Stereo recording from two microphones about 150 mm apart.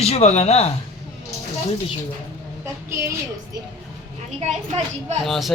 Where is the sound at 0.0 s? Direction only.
45° left (ahead or behind).